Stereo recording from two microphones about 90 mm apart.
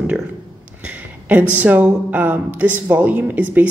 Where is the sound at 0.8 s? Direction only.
15° right (ahead or behind).